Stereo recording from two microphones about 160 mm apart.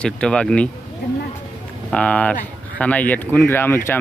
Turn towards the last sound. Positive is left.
turn(degrees=15)  # may be behind; listen again after turning